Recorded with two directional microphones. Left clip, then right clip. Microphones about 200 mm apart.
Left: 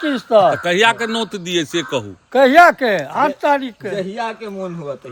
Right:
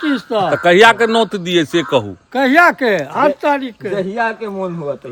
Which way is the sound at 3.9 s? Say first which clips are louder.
Right 6 dB; 25° right (ahead or behind).